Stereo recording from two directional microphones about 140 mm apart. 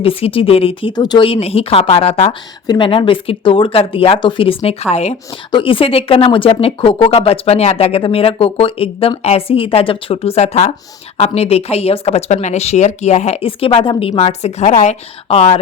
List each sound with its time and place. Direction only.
0.0 s speech: 40° left (ahead or behind)
5.5 s speech: 35° left (ahead or behind)